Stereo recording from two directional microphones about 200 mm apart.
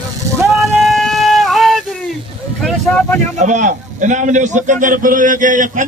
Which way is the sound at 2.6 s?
5° left (ahead or behind).